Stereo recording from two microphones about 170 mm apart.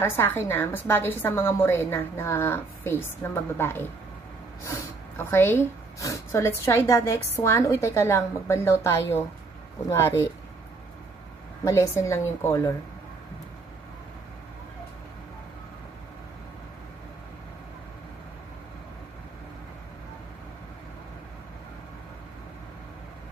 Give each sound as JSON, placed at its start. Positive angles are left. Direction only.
{"t": 0.0, "sound": "speech", "side_deg": 15}
{"t": 11.6, "sound": "speech", "side_deg": 15}